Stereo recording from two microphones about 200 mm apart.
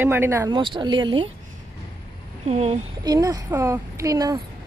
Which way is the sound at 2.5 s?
30° right (ahead or behind).